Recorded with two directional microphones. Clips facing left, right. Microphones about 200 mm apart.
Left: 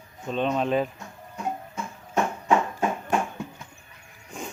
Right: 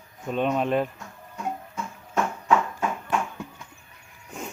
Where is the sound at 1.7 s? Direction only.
25° left (ahead or behind).